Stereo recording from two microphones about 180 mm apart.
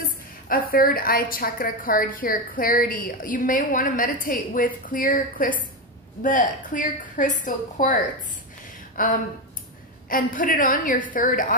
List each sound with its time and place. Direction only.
0.5 s a woman's voice: 55° left (ahead or behind)